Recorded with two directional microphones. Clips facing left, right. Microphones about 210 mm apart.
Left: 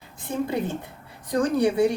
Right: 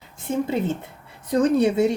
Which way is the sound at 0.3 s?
25° right (ahead or behind).